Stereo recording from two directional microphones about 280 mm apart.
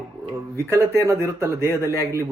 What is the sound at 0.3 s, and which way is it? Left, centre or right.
Speech, centre.